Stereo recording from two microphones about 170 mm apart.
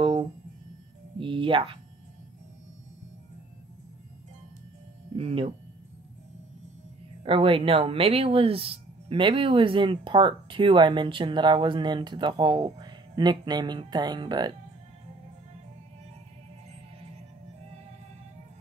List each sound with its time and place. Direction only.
1.2 s speech: 30° right (ahead or behind)
5.1 s speech: 35° right (ahead or behind)
7.2 s speech: 30° right (ahead or behind)